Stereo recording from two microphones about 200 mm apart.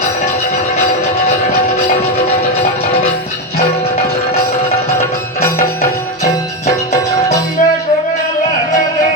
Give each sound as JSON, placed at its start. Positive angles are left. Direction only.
{"t": 3.8, "sound": "music", "side_deg": 30}
{"t": 6.7, "sound": "music", "side_deg": 35}